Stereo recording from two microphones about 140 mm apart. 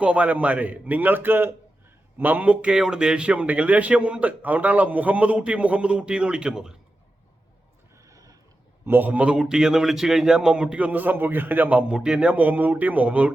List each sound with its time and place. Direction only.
0.0 s a man's voice: 10° right (ahead or behind)
8.0 s a sound: 25° right (ahead or behind)
8.8 s a man's voice: 15° right (ahead or behind)